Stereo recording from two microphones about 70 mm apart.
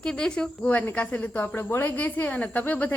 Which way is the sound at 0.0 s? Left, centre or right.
Centre.